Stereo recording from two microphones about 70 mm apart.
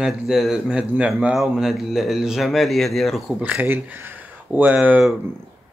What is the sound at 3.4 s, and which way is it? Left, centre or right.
Speech, right.